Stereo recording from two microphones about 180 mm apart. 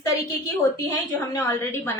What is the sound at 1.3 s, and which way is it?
Speech, 10° left (ahead or behind).